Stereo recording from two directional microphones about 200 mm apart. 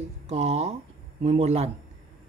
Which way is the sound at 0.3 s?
30° right (ahead or behind).